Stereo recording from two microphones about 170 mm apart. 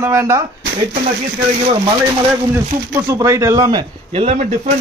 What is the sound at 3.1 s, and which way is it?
Speech, 15° right (ahead or behind).